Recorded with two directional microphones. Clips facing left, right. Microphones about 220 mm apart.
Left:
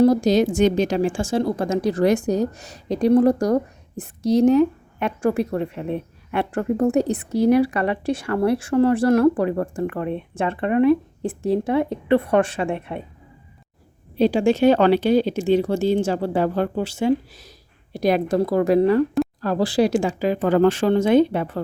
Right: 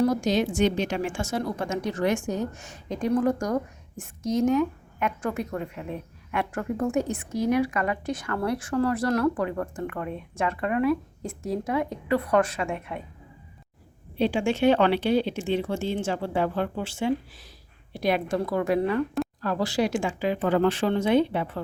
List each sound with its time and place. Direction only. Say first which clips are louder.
0.0 s a woman's voice: left 7 dB; 35° left (ahead or behind)
14.2 s a woman's voice: left 6 dB; 40° left (ahead or behind)